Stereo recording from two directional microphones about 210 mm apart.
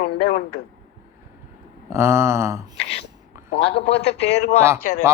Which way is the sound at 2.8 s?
30° left (ahead or behind).